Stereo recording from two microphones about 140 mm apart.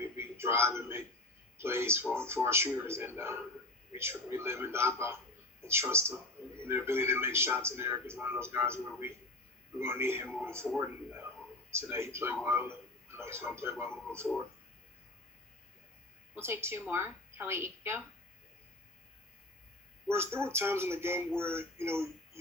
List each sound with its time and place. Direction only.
0.0 s a sound: 15° right (ahead or behind)
1.5 s a man's voice: 15° right (ahead or behind)
10.8 s a sound: 15° right (ahead or behind)
11.7 s a man's voice: 20° right (ahead or behind)
16.3 s a man's voice: 15° right (ahead or behind)
20.1 s a man's voice: 20° right (ahead or behind)